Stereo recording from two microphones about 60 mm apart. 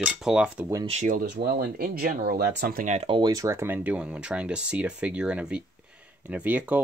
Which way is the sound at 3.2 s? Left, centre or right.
Right.